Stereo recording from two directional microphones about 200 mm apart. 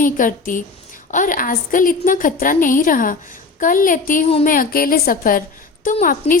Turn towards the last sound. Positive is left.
turn(degrees=45)  # may be behind; listen again after turning